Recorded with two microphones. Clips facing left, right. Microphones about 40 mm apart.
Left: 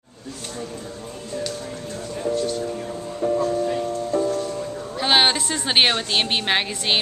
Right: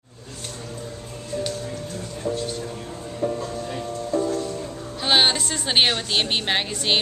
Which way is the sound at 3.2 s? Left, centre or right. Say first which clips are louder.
Left 3 dB; centre.